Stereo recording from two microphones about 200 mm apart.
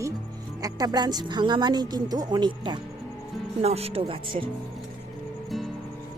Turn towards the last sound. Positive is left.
turn(degrees=-25)  # may be behind; listen again after turning